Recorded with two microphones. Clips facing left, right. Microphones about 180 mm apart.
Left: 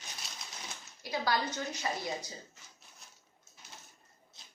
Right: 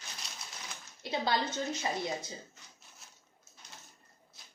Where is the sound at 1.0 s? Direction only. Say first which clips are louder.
Right 1 dB; 25° right (ahead or behind).